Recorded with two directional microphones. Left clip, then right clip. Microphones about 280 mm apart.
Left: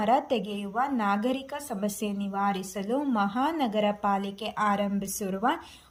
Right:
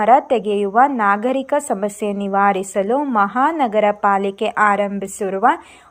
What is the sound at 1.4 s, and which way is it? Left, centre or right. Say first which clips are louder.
A woman's voice: right 15 dB; right.